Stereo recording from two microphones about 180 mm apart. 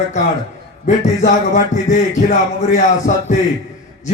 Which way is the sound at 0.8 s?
40° left (ahead or behind).